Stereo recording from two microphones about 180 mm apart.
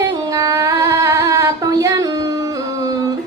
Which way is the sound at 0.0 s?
15° right (ahead or behind).